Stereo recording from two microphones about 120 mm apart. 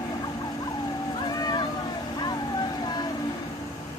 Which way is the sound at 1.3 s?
35° left (ahead or behind).